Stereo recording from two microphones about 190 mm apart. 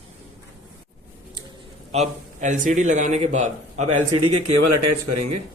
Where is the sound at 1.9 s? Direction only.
40° right (ahead or behind).